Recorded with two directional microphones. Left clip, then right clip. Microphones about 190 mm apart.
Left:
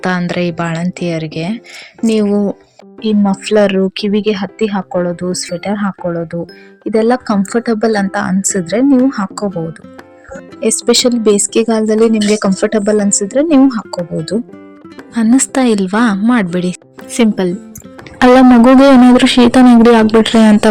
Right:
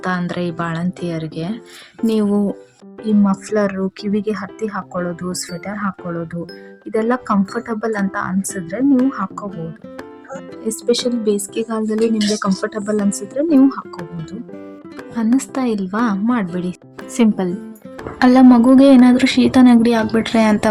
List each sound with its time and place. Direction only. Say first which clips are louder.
0.0 s a woman's voice: left 6 dB; 25° left (ahead or behind)
10.6 s a woman's voice: left 7 dB; 15° left (ahead or behind)
17.2 s speech: left 5 dB; 15° left (ahead or behind)
18.2 s a woman's voice: left 5 dB; 25° left (ahead or behind)